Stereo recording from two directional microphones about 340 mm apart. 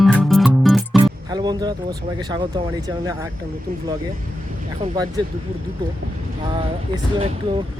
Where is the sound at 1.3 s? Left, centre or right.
Centre.